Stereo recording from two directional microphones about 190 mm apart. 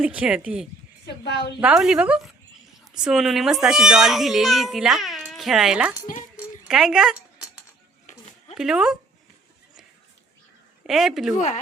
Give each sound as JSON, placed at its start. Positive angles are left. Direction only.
{"t": 0.0, "sound": "a child's voice", "side_deg": -5}
{"t": 1.0, "sound": "a woman's voice", "side_deg": 60}
{"t": 1.6, "sound": "a child's voice", "side_deg": -5}
{"t": 6.3, "sound": "a sound", "side_deg": 0}
{"t": 8.5, "sound": "a child's voice", "side_deg": -5}
{"t": 10.8, "sound": "a child's voice", "side_deg": 0}
{"t": 11.3, "sound": "a woman's voice", "side_deg": 40}